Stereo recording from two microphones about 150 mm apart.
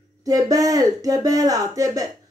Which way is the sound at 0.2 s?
25° right (ahead or behind).